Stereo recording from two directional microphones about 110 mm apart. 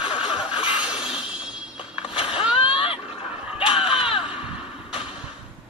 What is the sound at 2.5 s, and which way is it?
Splash, 55° left (ahead or behind).